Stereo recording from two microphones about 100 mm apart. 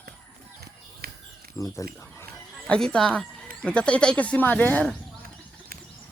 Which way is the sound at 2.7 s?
10° left (ahead or behind).